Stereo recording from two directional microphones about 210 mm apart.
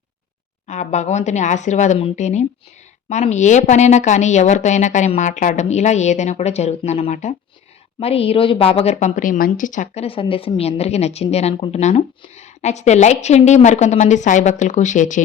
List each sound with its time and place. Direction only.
0.7 s a woman's voice: 35° left (ahead or behind)